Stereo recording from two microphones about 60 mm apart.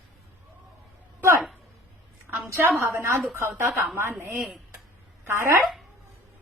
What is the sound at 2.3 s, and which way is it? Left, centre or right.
A woman's voice, right.